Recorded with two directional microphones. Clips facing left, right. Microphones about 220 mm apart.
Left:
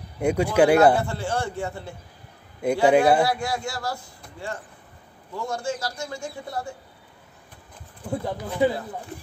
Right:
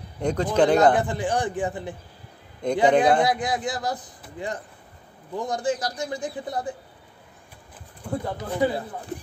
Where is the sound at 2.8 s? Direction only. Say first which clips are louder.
Left 1 dB; 5° left (ahead or behind).